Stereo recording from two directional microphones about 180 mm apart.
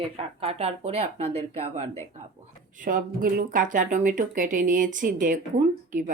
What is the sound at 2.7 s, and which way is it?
Speech, 50° right (ahead or behind).